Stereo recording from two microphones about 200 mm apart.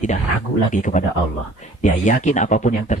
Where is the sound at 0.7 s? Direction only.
40° left (ahead or behind).